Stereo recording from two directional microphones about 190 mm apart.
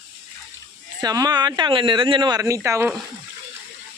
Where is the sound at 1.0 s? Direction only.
20° right (ahead or behind).